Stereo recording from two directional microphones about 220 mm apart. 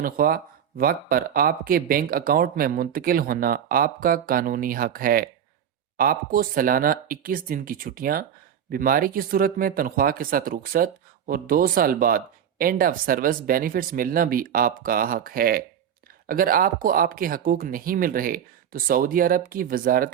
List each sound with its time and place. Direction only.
0.0 s speech: 40° right (ahead or behind)